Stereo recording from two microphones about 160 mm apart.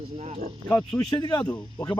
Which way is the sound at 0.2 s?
40° right (ahead or behind).